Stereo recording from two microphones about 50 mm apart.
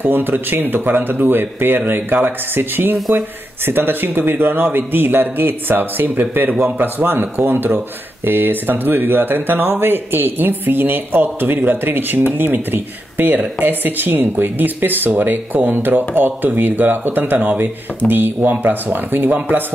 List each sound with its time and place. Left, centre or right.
0.0 s speech: right